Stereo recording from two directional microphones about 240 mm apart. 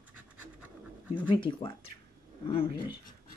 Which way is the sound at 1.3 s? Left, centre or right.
Centre.